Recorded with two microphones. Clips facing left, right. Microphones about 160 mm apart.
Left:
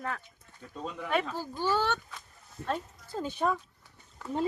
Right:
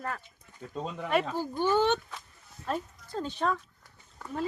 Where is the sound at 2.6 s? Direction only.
50° left (ahead or behind).